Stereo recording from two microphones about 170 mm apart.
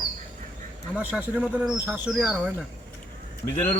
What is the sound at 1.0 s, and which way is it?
Speech, 5° right (ahead or behind).